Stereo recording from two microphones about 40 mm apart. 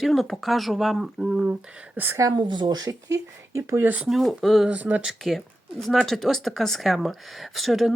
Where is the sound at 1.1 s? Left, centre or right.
Centre.